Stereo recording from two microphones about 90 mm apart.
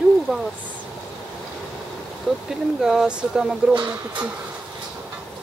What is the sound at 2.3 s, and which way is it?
Speech, 10° right (ahead or behind).